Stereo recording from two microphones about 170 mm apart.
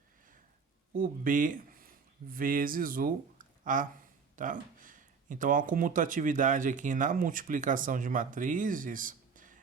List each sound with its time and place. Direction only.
0.9 s speech: 55° right (ahead or behind)